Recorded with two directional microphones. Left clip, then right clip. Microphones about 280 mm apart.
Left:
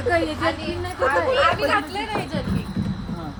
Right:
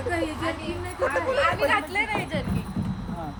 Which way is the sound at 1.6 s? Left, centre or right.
Centre.